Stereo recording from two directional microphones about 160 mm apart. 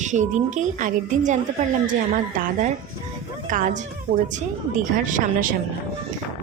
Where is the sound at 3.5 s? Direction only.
55° right (ahead or behind).